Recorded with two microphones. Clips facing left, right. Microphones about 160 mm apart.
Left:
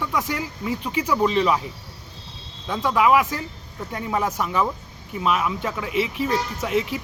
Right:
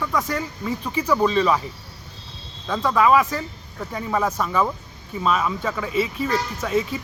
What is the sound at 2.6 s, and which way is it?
Speech, 10° left (ahead or behind).